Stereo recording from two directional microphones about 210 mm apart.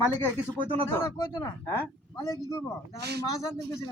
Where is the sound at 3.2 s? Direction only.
15° left (ahead or behind).